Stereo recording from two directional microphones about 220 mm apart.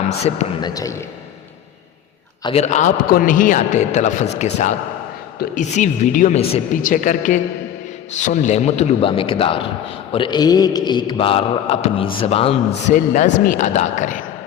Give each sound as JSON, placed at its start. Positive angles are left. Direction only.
{"t": 0.2, "sound": "mantra", "side_deg": 30}
{"t": 0.7, "sound": "a man's voice", "side_deg": 15}
{"t": 2.4, "sound": "a man's voice", "side_deg": 25}
{"t": 8.2, "sound": "mantra", "side_deg": 30}
{"t": 12.2, "sound": "a man's voice", "side_deg": 25}